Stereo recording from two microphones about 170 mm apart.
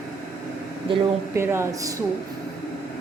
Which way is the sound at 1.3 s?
15° right (ahead or behind).